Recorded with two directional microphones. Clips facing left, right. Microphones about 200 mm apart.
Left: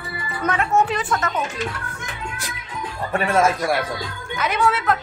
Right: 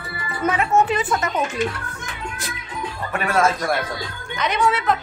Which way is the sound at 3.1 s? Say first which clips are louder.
Left 1 dB; 25° left (ahead or behind).